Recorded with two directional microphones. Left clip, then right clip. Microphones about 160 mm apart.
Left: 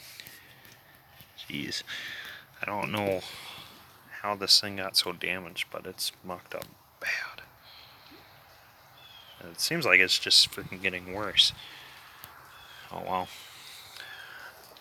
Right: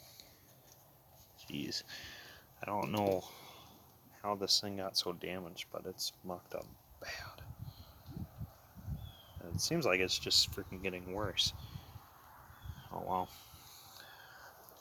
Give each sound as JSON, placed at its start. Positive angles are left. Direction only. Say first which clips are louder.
{"t": 1.5, "sound": "speech", "louder": "left 7 dB", "side_deg": 10}
{"t": 2.6, "sound": "speech", "louder": "left 5 dB", "side_deg": 0}
{"t": 9.4, "sound": "speech", "louder": "left 6 dB", "side_deg": -5}
{"t": 12.9, "sound": "a sound", "louder": "left 5 dB", "side_deg": 5}